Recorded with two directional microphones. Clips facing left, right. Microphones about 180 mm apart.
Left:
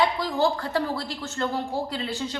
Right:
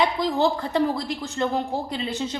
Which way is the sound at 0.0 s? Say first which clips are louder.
Right 2 dB; 20° right (ahead or behind).